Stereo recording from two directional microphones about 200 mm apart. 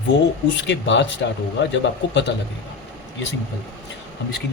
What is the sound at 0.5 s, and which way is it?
Speech, 65° left (ahead or behind).